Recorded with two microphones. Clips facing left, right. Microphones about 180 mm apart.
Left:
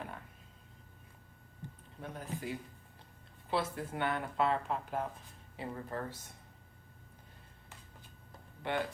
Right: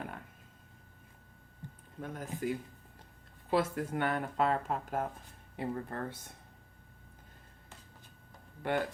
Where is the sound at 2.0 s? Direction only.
45° right (ahead or behind).